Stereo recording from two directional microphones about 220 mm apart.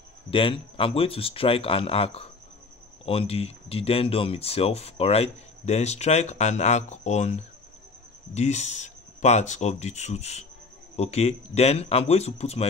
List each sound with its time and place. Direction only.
0.3 s speech: 25° left (ahead or behind)